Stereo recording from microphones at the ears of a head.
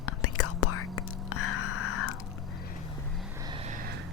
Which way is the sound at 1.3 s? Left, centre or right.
Left.